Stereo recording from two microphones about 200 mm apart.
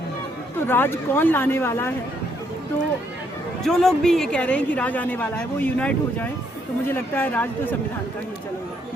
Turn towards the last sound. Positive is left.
turn(degrees=10)  # may be behind; listen again after turning